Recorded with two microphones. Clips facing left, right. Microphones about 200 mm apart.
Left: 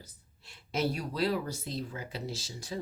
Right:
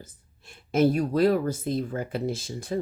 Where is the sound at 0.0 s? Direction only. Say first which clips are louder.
Right 7 dB; 50° right (ahead or behind).